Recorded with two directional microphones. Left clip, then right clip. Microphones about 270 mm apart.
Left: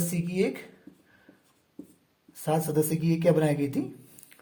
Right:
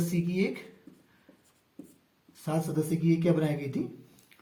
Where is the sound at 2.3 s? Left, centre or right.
Left.